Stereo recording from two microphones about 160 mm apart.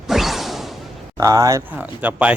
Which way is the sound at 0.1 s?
Centre (ahead or behind).